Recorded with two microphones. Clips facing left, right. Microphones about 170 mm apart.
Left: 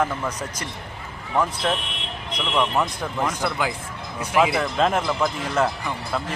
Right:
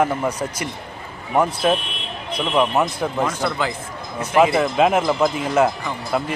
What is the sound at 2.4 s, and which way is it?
Speech, 20° right (ahead or behind).